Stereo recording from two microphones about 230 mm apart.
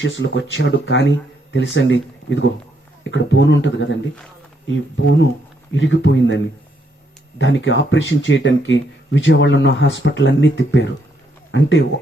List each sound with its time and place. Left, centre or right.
0.0 s speech: left